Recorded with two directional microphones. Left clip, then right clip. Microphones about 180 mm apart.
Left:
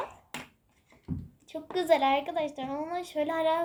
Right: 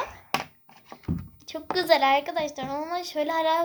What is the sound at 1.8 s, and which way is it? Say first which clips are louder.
A child's voice: right 4 dB; 5° left (ahead or behind).